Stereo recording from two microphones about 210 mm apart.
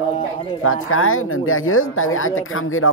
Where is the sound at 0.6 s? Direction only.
85° left.